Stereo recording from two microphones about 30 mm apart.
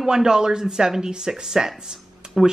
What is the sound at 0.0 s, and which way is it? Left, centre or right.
A woman's voice, right.